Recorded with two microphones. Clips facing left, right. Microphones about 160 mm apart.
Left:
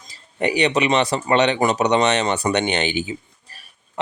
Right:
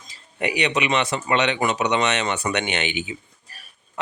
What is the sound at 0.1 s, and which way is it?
Speech, 35° left (ahead or behind).